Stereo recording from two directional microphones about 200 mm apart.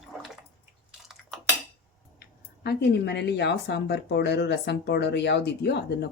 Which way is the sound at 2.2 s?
55° left (ahead or behind).